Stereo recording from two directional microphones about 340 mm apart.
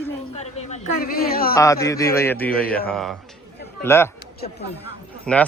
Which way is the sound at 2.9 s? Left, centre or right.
Centre.